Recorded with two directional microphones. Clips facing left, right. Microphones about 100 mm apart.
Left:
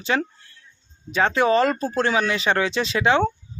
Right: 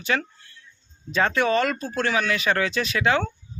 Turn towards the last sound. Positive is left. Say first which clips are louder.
# left 3 dB
turn(degrees=25)  # may be behind; listen again after turning